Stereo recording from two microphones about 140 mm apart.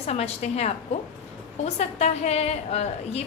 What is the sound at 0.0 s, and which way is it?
A woman's voice, 50° left (ahead or behind).